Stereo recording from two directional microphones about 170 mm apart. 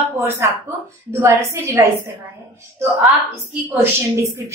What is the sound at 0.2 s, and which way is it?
A woman's voice, 15° right (ahead or behind).